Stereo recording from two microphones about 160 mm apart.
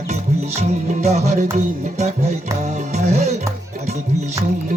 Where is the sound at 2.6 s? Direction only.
45° right (ahead or behind).